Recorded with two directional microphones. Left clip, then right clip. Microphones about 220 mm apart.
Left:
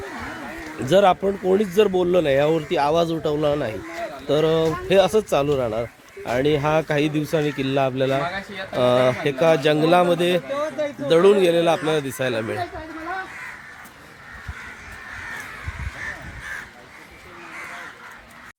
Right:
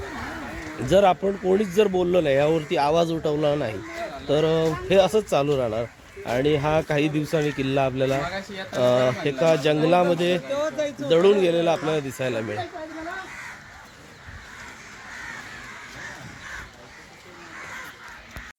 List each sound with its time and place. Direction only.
0.9 s a man's voice: 5° left (ahead or behind)
10.5 s speech: 50° right (ahead or behind)
11.1 s a man's voice: 10° left (ahead or behind)